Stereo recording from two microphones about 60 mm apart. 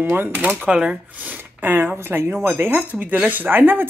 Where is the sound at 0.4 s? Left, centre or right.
Right.